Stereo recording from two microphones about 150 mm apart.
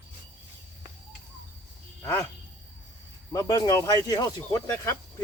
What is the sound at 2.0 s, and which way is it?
Speech, 20° left (ahead or behind).